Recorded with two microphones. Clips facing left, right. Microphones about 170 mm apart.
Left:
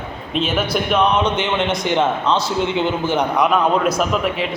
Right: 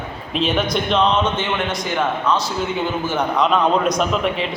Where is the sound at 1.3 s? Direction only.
25° left (ahead or behind).